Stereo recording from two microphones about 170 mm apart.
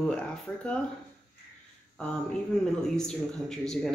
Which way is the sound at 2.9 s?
5° left (ahead or behind).